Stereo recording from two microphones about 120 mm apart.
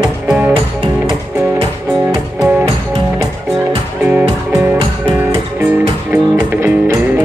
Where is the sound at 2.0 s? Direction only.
10° right (ahead or behind).